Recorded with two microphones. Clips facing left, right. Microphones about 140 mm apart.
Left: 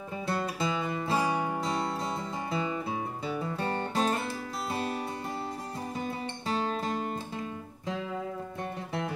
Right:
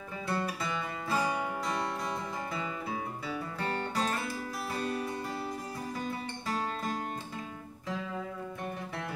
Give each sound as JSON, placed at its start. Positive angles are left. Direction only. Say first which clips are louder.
{"t": 0.3, "sound": "music", "louder": "left 3 dB", "side_deg": 25}
{"t": 2.5, "sound": "music", "louder": "left 8 dB", "side_deg": 25}
{"t": 6.5, "sound": "music", "louder": "left 4 dB", "side_deg": 25}